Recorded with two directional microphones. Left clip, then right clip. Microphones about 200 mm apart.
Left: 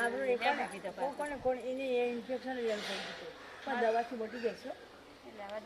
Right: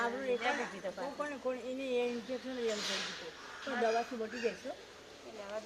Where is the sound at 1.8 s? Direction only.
10° right (ahead or behind).